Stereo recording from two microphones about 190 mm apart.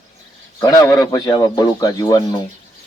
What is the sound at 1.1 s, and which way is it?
Speech, 20° left (ahead or behind).